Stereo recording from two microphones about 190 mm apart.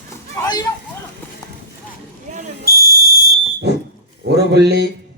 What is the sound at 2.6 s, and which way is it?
Fire alarm, 50° left (ahead or behind).